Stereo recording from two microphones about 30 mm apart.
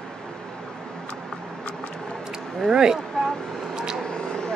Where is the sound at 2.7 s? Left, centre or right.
Right.